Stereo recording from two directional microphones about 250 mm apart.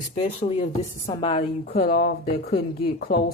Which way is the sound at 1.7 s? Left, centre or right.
Left.